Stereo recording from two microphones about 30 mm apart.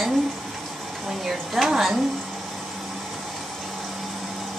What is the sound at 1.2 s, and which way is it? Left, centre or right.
Speech, centre.